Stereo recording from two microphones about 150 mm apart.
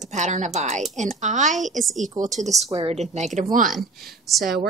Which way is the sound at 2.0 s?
55° right (ahead or behind).